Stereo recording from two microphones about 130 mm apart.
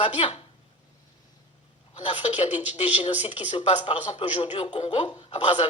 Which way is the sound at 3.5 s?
40° left (ahead or behind).